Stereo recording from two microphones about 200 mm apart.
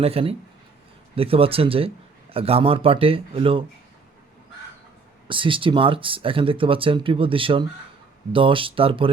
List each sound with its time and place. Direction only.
0.0 s speech: 30° right (ahead or behind)
5.3 s speech: 25° right (ahead or behind)